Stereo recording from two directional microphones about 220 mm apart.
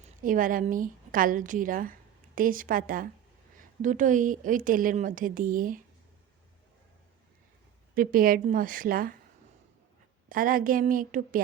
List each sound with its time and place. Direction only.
0.2 s a woman's voice: 40° right (ahead or behind)
7.9 s a woman's voice: 40° right (ahead or behind)
10.2 s a woman's voice: 40° right (ahead or behind)